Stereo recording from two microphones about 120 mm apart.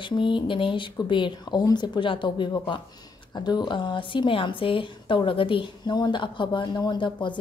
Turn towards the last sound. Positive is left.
turn(degrees=40)  # may be behind; listen again after turning